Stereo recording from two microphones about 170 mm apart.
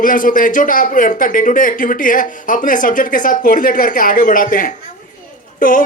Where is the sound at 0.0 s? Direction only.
55° left (ahead or behind).